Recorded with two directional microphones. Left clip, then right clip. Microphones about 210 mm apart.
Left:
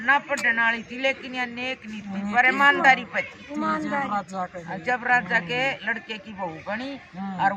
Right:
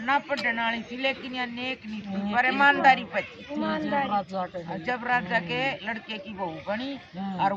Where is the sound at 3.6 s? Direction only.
15° right (ahead or behind).